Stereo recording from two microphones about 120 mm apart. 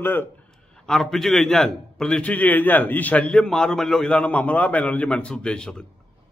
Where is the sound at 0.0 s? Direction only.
15° left (ahead or behind).